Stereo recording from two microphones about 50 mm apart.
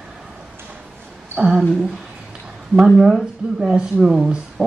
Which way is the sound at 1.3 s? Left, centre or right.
Centre.